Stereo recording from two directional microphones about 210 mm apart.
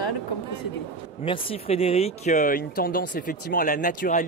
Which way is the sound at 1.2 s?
25° left (ahead or behind).